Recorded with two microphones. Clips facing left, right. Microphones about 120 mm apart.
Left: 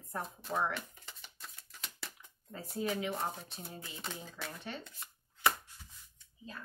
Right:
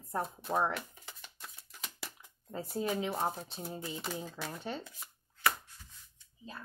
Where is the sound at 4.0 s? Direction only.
5° right (ahead or behind).